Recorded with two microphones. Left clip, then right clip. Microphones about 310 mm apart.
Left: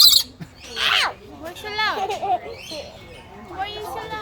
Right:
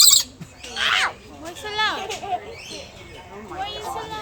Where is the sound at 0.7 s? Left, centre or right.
Left.